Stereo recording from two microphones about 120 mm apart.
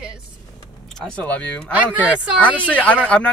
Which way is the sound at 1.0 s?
10° left (ahead or behind).